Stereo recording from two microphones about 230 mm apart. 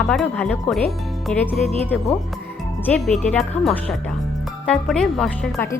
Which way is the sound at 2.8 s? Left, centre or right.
Centre.